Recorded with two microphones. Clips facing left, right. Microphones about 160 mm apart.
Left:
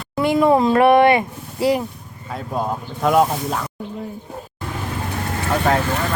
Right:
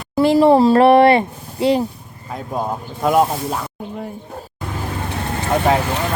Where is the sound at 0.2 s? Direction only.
30° right (ahead or behind).